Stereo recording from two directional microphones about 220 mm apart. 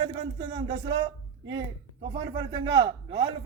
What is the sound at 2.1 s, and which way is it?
Speech, 20° right (ahead or behind).